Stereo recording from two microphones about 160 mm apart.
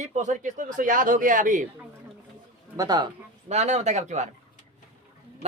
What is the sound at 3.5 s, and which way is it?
Speech, 45° right (ahead or behind).